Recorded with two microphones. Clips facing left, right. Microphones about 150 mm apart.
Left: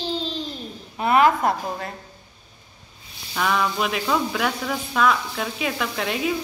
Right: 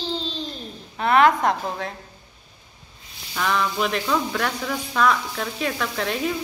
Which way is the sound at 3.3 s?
5° left (ahead or behind).